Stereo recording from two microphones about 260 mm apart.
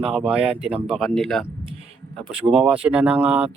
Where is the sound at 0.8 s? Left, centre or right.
Centre.